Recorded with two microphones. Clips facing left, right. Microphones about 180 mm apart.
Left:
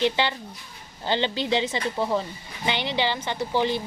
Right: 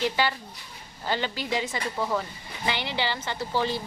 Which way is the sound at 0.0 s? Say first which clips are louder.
Left 2 dB; 20° left (ahead or behind).